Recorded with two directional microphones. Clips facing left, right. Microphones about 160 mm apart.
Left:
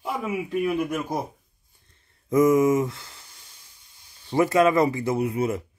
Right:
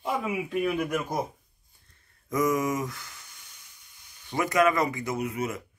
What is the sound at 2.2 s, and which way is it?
Speech, 25° left (ahead or behind).